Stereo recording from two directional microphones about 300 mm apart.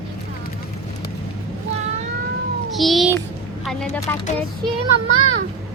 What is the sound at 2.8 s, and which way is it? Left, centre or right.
A child's voice, centre.